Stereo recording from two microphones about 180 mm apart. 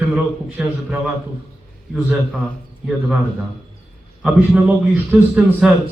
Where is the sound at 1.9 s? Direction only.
5° right (ahead or behind).